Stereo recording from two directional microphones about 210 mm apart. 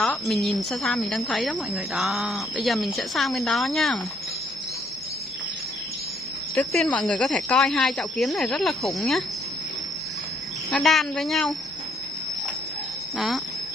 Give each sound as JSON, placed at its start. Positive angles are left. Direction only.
{"t": 0.0, "sound": "a woman's voice", "side_deg": 0}
{"t": 6.5, "sound": "a woman's voice", "side_deg": 0}
{"t": 10.7, "sound": "a woman's voice", "side_deg": 0}